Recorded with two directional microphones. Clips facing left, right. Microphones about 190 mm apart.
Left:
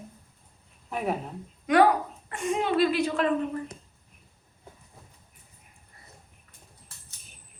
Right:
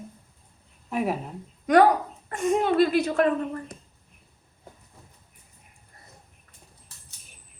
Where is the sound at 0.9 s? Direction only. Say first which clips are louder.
Right 3 dB; 5° right (ahead or behind).